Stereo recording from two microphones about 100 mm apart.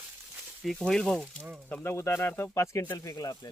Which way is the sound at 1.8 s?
25° left (ahead or behind).